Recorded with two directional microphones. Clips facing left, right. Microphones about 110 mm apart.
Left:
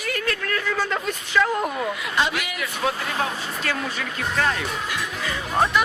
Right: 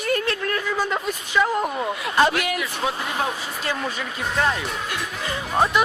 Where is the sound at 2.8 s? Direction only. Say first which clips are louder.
Left 2 dB; 5° right (ahead or behind).